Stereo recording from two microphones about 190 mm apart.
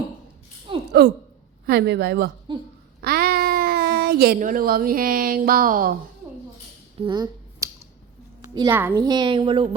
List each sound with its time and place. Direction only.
1.0 s a woman's voice: 55° right (ahead or behind)
7.0 s a sound: 25° right (ahead or behind)
8.7 s a woman's voice: 10° right (ahead or behind)
9.0 s a woman's voice: 25° right (ahead or behind)